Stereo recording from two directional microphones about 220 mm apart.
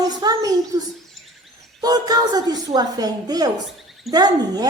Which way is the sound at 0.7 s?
20° right (ahead or behind).